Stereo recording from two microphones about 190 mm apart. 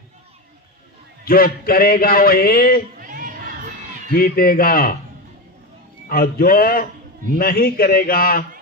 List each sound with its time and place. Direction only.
1.2 s a man's voice: 50° left (ahead or behind)
3.0 s a sound: 45° right (ahead or behind)
4.1 s a man's voice: 50° left (ahead or behind)
6.1 s a man's voice: 50° left (ahead or behind)